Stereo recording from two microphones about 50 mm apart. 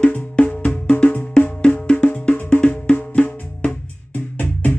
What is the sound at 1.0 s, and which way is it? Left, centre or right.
Music, left.